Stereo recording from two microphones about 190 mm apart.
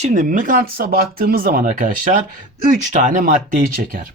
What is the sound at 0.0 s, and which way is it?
Speech, 45° right (ahead or behind).